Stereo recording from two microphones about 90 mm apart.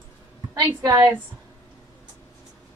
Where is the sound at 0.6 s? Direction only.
40° right (ahead or behind).